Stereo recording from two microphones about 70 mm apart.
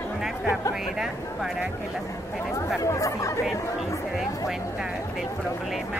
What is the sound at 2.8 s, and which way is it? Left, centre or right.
Speech, left.